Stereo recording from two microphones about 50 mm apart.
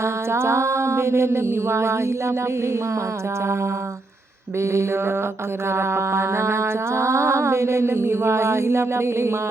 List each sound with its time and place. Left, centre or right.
0.0 s mantra: right
4.6 s mantra: right